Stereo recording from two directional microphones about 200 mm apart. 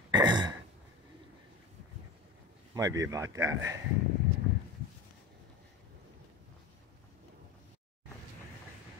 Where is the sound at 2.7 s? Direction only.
15° right (ahead or behind).